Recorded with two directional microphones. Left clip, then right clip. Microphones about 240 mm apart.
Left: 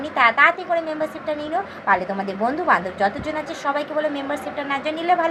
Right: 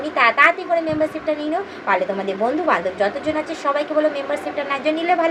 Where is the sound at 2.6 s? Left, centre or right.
Centre.